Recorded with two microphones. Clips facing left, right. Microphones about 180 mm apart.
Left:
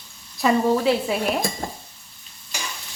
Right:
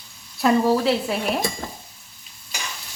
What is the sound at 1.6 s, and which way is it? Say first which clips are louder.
Stir: left 3 dB; 45° left (ahead or behind).